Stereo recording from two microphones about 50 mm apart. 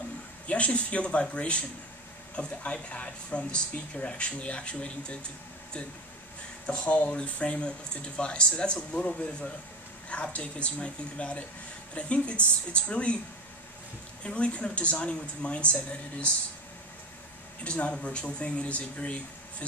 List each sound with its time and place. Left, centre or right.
0.5 s speech: left
6.6 s speech: left
14.2 s speech: left
17.6 s speech: left